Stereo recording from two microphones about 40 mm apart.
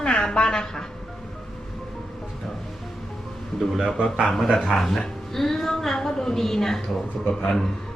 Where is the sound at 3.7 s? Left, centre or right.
Centre.